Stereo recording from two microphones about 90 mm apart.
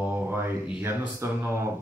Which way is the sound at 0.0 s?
25° right (ahead or behind).